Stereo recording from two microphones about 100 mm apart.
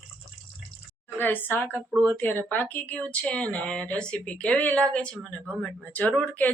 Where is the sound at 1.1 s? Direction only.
20° left (ahead or behind).